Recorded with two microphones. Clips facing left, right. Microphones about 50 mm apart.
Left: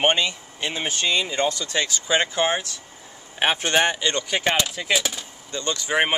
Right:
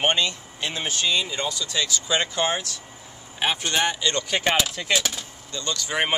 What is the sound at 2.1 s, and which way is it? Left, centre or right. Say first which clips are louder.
Speech: left 3 dB; centre.